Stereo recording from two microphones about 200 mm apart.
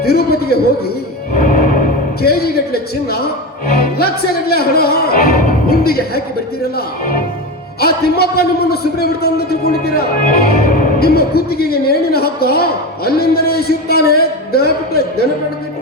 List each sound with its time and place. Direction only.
0.0 s a sound: 50° left (ahead or behind)
1.3 s music: 40° left (ahead or behind)
3.9 s a man's voice: 50° left (ahead or behind)